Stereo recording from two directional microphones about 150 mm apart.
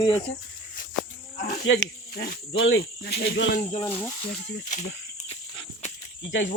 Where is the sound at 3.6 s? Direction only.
40° left (ahead or behind).